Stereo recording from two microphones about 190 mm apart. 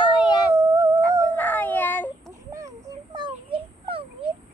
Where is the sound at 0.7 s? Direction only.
15° right (ahead or behind).